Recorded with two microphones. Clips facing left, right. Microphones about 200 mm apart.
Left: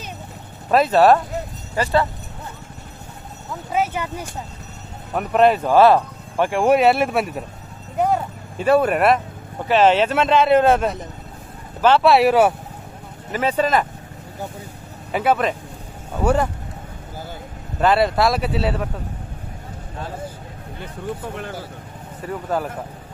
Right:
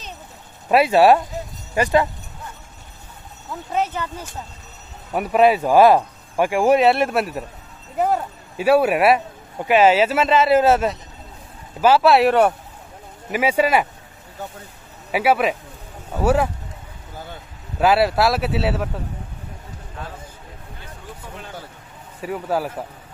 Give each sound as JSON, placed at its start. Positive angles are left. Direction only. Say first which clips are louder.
{"t": 0.7, "sound": "speech", "louder": "even", "side_deg": -10}
{"t": 3.7, "sound": "speech", "louder": "left 1 dB", "side_deg": 10}
{"t": 5.1, "sound": "speech", "louder": "even", "side_deg": -5}
{"t": 13.3, "sound": "speech", "louder": "right 1 dB", "side_deg": -10}
{"t": 15.0, "sound": "speech", "louder": "right 1 dB", "side_deg": -5}
{"t": 17.7, "sound": "speech", "louder": "even", "side_deg": -5}
{"t": 22.2, "sound": "speech", "louder": "right 1 dB", "side_deg": -10}